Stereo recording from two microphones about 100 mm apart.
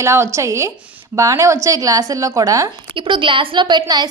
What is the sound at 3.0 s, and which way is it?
A woman's voice, 55° right (ahead or behind).